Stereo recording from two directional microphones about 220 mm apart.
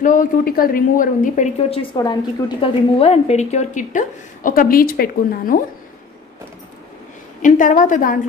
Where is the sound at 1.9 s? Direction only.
20° left (ahead or behind); by 5.6 s 40° left (ahead or behind).